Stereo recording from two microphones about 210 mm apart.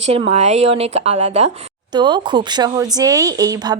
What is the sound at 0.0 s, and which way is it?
A woman's voice, 30° right (ahead or behind).